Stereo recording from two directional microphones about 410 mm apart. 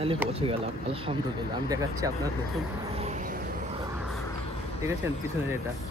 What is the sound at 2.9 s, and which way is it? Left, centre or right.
Vehicle, centre.